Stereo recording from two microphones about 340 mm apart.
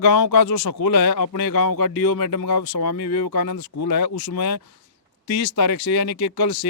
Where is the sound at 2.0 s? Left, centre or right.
Left.